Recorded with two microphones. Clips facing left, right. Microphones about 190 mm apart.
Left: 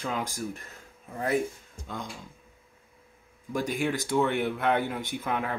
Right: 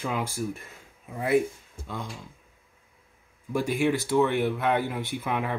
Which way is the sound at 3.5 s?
5° right (ahead or behind).